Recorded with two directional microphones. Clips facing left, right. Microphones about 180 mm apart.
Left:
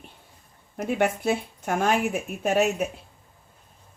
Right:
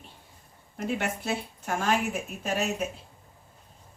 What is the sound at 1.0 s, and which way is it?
Speech, 55° left (ahead or behind).